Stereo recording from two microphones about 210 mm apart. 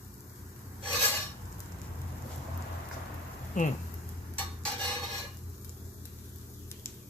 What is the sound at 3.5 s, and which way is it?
Speech, 35° left (ahead or behind).